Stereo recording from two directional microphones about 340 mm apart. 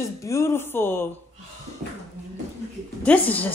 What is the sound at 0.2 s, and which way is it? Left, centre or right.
Speech, centre.